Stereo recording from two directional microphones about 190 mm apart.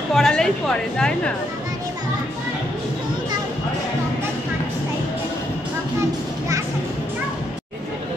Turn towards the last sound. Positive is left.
turn(degrees=-15)  # may be behind; listen again after turning